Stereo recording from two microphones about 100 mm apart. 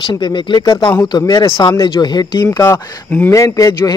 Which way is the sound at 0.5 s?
50° left (ahead or behind).